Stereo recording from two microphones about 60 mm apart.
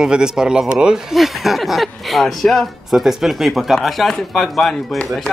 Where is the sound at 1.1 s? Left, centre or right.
Centre.